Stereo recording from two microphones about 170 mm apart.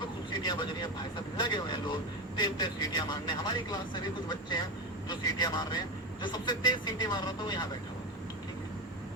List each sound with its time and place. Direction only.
0.4 s speech: 25° left (ahead or behind)